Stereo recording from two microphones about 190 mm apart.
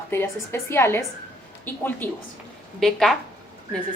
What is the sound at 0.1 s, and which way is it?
A woman's voice, 15° left (ahead or behind).